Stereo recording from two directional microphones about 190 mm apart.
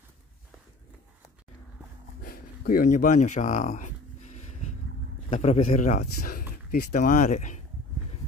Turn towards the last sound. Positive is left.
turn(degrees=40)  # may be behind; listen again after turning